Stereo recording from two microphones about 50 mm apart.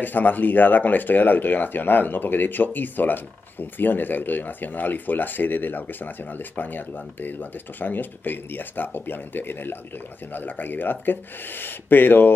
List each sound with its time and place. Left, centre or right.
0.0 s speech: left